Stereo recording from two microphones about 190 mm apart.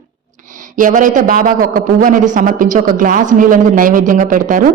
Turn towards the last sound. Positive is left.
turn(degrees=-45)  # may be behind; listen again after turning